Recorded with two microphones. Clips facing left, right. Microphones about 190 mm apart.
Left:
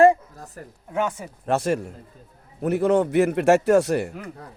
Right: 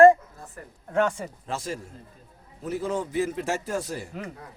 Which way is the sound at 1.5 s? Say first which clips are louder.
Left 12 dB; 65° left (ahead or behind).